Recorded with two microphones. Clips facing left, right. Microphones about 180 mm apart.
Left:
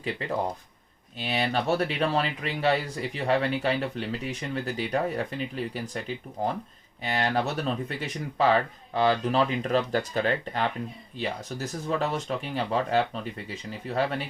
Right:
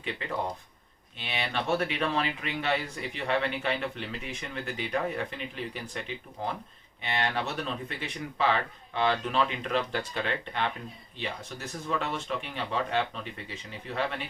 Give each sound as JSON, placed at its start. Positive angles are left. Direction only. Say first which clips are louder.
{"t": 1.2, "sound": "speech", "louder": "left 6 dB", "side_deg": 40}